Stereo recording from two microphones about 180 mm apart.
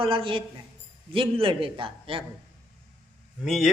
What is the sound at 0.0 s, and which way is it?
A man's voice, 30° right (ahead or behind).